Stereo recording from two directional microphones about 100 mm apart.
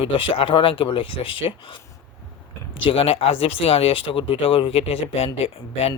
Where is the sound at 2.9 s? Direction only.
75° left (ahead or behind).